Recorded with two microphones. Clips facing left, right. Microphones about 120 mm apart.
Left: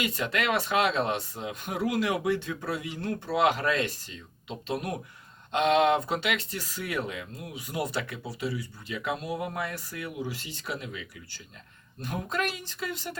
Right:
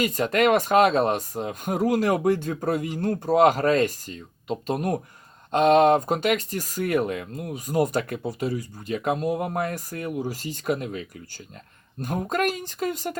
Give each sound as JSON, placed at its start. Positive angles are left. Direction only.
{"t": 0.0, "sound": "speech", "side_deg": -40}
{"t": 12.0, "sound": "speech", "side_deg": -45}